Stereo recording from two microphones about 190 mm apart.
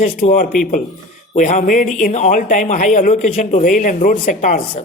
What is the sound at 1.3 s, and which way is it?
A man's voice, 40° left (ahead or behind).